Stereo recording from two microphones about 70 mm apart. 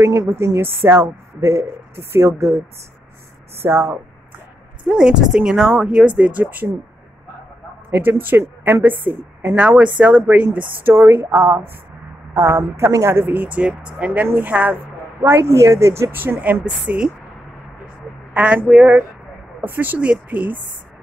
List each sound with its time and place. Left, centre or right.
0.6 s a woman's voice: right
3.5 s a woman's voice: right
4.8 s speech: centre
7.9 s a woman's voice: right
15.2 s a woman's voice: right; by 17.1 s centre
18.3 s a woman's voice: centre